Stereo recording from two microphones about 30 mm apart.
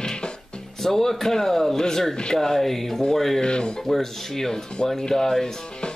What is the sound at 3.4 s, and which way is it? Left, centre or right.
Speech, left.